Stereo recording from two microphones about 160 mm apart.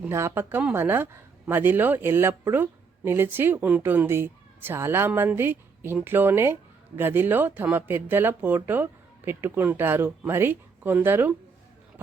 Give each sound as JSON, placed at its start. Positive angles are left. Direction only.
{"t": 0.0, "sound": "speech", "side_deg": -15}